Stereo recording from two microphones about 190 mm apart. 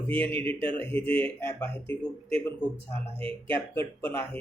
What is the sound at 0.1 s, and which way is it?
Speech, 10° left (ahead or behind).